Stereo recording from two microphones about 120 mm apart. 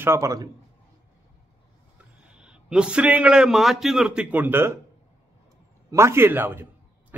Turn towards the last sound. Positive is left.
turn(degrees=-15)  # may be behind; listen again after turning